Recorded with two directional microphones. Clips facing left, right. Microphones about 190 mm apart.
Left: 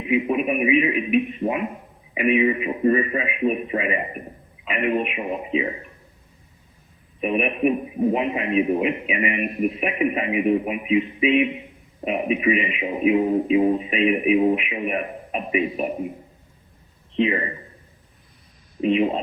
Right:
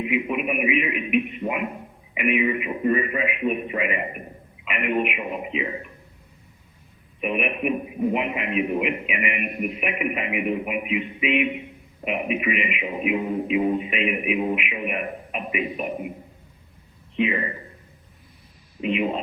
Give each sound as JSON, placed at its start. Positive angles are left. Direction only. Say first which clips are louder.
{"t": 0.1, "sound": "a sound", "louder": "left 8 dB", "side_deg": 35}
{"t": 2.1, "sound": "a man's voice", "louder": "left 3 dB", "side_deg": 35}
{"t": 7.2, "sound": "a man's voice", "louder": "left 4 dB", "side_deg": 35}
{"t": 17.2, "sound": "a man's voice", "louder": "left 3 dB", "side_deg": 35}
{"t": 18.8, "sound": "a man's voice", "louder": "left 4 dB", "side_deg": 35}